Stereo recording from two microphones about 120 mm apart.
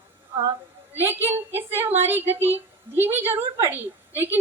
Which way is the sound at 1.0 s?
15° right (ahead or behind).